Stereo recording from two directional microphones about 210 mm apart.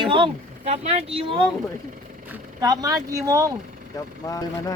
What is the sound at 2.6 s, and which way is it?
Speech, 15° right (ahead or behind).